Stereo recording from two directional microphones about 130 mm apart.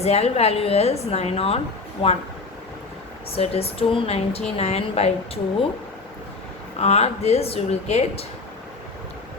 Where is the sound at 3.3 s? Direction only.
50° left (ahead or behind).